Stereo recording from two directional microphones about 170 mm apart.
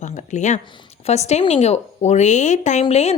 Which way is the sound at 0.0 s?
45° left (ahead or behind).